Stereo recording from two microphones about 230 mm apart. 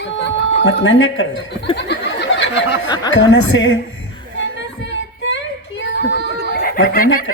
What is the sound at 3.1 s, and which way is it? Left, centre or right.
Speech, left.